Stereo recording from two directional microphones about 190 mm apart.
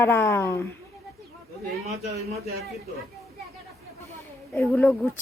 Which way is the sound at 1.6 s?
55° right (ahead or behind).